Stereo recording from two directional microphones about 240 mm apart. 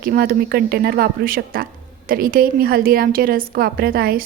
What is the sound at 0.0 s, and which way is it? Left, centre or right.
A woman's voice, right.